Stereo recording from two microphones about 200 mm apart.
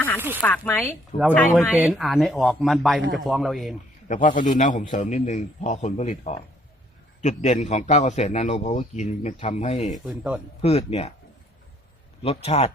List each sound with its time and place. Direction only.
0.2 s speech: 10° right (ahead or behind)
0.4 s speech: 10° left (ahead or behind)
1.7 s speech: 5° right (ahead or behind)
4.1 s a man's voice: 40° left (ahead or behind)
9.9 s speech: 5° right (ahead or behind)
10.6 s a man's voice: 30° left (ahead or behind)
12.2 s a man's voice: 30° left (ahead or behind)